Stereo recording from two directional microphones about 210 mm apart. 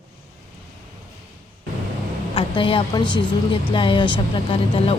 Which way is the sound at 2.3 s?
25° left (ahead or behind).